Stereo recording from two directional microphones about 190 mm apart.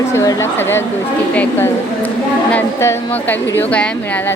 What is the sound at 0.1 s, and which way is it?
Speech, 15° left (ahead or behind).